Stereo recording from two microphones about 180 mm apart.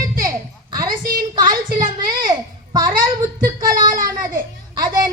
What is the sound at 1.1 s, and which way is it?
Child singing, 25° right (ahead or behind).